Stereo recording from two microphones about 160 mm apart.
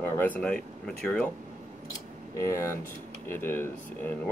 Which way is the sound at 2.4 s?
20° left (ahead or behind).